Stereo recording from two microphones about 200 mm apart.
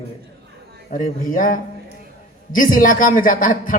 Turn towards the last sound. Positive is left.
turn(degrees=45)  # may be behind; listen again after turning